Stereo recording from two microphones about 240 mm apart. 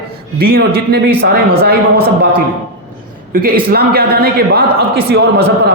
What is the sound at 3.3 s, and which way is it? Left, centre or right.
A man's voice, right.